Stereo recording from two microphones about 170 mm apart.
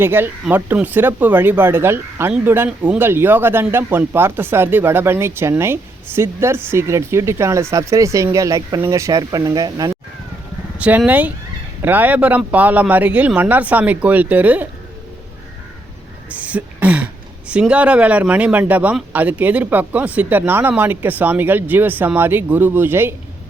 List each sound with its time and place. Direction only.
0.0 s speech: 10° right (ahead or behind)
10.8 s speech: 10° right (ahead or behind)
16.3 s throat clearing: 10° right (ahead or behind)
17.5 s speech: 5° right (ahead or behind)